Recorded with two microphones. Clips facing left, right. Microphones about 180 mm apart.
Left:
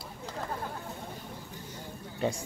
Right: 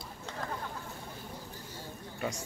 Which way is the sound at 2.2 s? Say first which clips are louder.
Left 5 dB; 30° left (ahead or behind).